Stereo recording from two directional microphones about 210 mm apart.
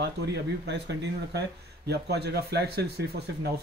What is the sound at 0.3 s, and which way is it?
Speech, 55° right (ahead or behind).